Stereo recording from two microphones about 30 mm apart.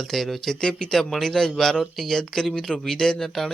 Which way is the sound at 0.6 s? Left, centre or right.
Left.